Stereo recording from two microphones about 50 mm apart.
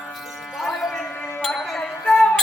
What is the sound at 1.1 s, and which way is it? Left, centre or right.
Music, left.